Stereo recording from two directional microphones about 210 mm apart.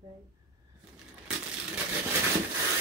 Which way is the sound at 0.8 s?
5° right (ahead or behind).